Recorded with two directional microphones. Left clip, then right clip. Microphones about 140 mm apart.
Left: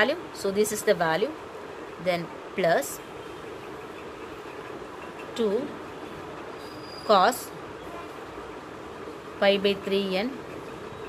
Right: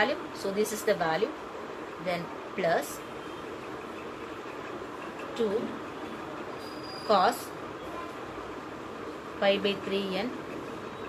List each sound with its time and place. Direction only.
0.0 s speech: 90° left
7.1 s speech: 75° left (ahead or behind)
9.4 s speech: 70° left (ahead or behind)